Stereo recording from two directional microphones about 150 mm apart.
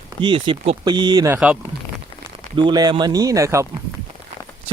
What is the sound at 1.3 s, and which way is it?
Speech, 10° right (ahead or behind).